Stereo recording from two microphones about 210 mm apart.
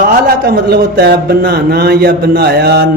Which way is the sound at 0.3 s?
45° right (ahead or behind).